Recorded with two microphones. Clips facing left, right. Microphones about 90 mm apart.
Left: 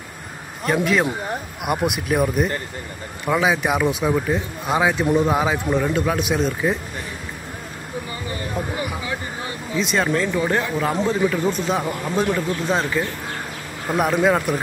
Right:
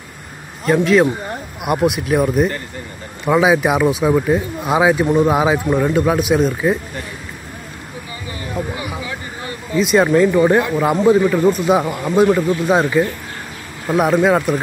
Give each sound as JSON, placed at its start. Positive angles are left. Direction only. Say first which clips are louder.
{"t": 0.7, "sound": "a man's voice", "louder": "right 7 dB", "side_deg": 5}
{"t": 9.8, "sound": "speech", "louder": "right 8 dB", "side_deg": -5}
{"t": 10.0, "sound": "a man's voice", "louder": "right 8 dB", "side_deg": -15}
{"t": 13.8, "sound": "speech", "louder": "right 4 dB", "side_deg": 0}